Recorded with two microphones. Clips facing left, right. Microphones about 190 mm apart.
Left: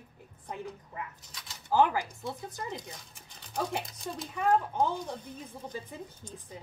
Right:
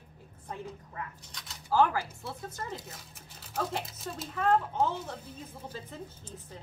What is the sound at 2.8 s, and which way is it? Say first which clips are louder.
A child's voice: left 2 dB; 5° right (ahead or behind).